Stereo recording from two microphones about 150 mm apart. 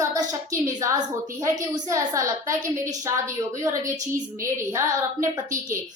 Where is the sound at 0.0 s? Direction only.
25° right (ahead or behind).